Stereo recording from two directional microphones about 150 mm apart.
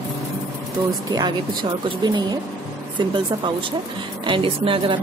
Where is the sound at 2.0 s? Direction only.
30° right (ahead or behind).